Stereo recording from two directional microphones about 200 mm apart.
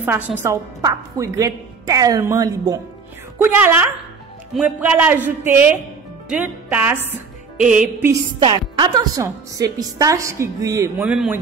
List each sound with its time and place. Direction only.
0.0 s a woman's voice: 10° right (ahead or behind)
8.4 s a woman's voice: 20° right (ahead or behind)
11.1 s a man's voice: 5° right (ahead or behind)